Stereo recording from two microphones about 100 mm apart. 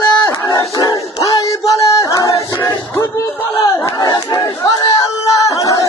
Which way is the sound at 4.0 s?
40° left (ahead or behind).